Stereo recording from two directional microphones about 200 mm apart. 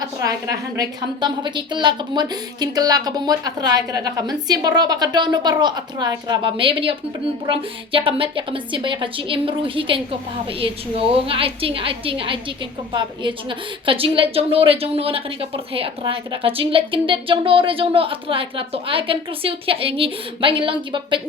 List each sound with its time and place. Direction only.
0.0 s a woman's voice: 15° right (ahead or behind)